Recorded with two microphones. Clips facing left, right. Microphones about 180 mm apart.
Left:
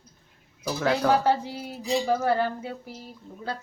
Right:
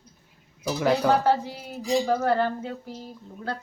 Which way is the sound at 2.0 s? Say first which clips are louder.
Right 1 dB; 10° left (ahead or behind).